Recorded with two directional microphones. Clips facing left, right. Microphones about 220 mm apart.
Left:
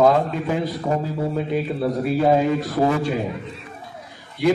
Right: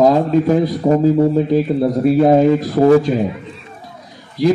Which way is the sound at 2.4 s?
40° right (ahead or behind).